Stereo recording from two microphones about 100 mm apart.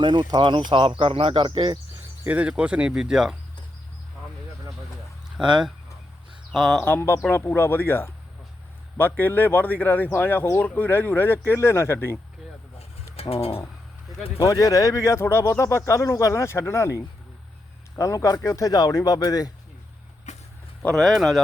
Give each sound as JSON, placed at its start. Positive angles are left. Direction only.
{"t": 0.0, "sound": "speech", "side_deg": -50}
{"t": 2.2, "sound": "speech", "side_deg": -15}
{"t": 5.4, "sound": "speech", "side_deg": -5}
{"t": 6.7, "sound": "speech", "side_deg": 15}
{"t": 13.3, "sound": "speech", "side_deg": 75}
{"t": 14.4, "sound": "speech", "side_deg": 35}
{"t": 20.8, "sound": "speech", "side_deg": 5}